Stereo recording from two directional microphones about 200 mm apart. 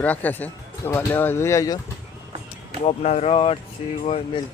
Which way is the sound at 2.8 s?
30° left (ahead or behind).